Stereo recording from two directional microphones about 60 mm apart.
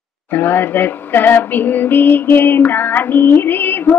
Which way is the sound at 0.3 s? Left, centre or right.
Left.